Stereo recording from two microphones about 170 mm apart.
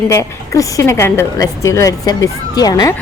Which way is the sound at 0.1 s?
20° left (ahead or behind).